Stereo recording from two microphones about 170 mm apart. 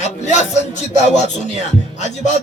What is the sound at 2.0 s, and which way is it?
Music, 40° left (ahead or behind).